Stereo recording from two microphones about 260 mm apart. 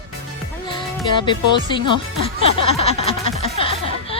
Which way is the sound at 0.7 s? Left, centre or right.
Centre.